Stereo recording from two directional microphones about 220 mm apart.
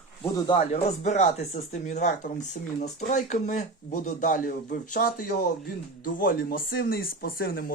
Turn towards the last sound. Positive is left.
turn(degrees=45)  # may be behind; listen again after turning